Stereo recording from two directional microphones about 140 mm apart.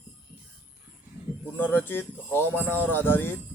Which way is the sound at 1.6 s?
15° left (ahead or behind).